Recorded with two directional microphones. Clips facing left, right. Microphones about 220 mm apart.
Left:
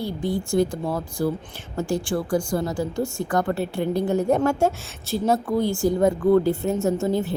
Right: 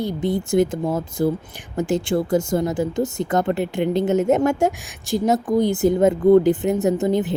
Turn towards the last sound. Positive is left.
turn(degrees=-20)  # may be behind; listen again after turning